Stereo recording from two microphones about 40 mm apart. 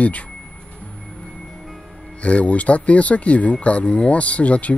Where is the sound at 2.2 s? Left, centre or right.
Left.